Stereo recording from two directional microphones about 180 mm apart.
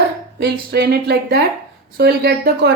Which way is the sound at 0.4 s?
65° right (ahead or behind).